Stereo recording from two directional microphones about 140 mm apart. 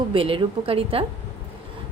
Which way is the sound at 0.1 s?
40° right (ahead or behind).